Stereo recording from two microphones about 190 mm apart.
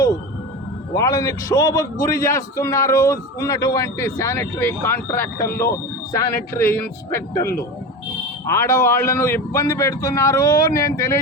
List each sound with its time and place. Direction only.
0.9 s a man's voice: 15° left (ahead or behind)